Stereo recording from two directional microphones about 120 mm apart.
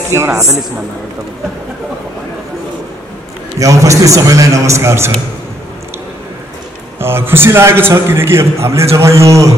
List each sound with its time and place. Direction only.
0.1 s a man's voice: 20° right (ahead or behind)
3.5 s a man's voice: 25° right (ahead or behind)
7.0 s a man's voice: 20° right (ahead or behind)